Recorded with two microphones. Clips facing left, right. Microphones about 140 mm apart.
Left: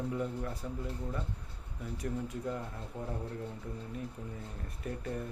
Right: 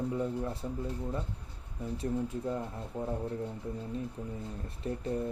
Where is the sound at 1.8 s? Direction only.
25° right (ahead or behind).